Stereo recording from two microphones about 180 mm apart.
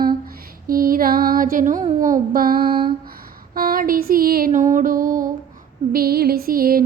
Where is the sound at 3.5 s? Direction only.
55° right (ahead or behind).